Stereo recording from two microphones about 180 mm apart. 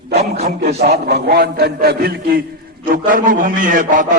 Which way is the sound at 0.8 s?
60° right (ahead or behind).